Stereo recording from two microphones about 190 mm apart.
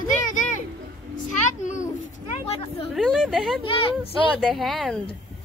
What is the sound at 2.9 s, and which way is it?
Speech, centre (ahead or behind).